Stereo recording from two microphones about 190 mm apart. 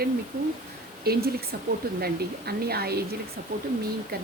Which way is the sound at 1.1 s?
55° right (ahead or behind).